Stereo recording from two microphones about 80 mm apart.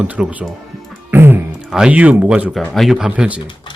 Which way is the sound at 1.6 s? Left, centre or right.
Centre.